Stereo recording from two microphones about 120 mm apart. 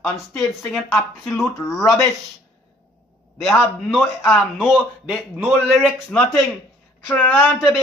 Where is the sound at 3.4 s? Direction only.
Centre (ahead or behind).